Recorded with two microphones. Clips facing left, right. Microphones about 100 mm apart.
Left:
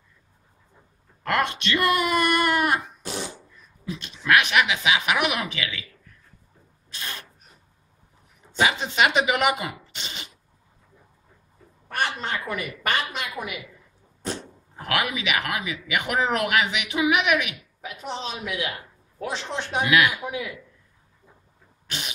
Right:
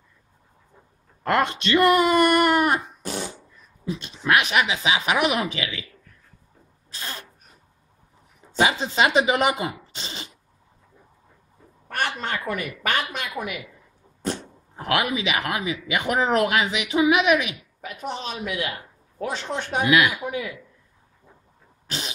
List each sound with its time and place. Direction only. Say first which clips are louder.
1.2 s speech: right 3 dB; 30° right (ahead or behind)
3.9 s speech: even; 30° right (ahead or behind)
6.9 s rub: right 1 dB; 30° right (ahead or behind)
8.5 s speech: right 1 dB; 30° right (ahead or behind)
11.9 s a sound: even; 50° right (ahead or behind)
14.8 s speech: right 3 dB; 30° right (ahead or behind)
17.8 s a man's voice: right 1 dB; 45° right (ahead or behind)